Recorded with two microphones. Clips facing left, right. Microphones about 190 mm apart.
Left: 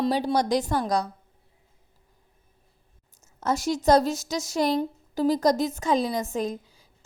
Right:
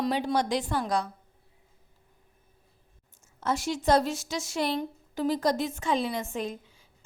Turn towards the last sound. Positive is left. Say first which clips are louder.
# left 5 dB
turn(degrees=40)  # may be behind; listen again after turning